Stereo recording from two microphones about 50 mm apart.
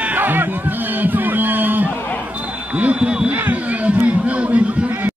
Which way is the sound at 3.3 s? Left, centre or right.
Right.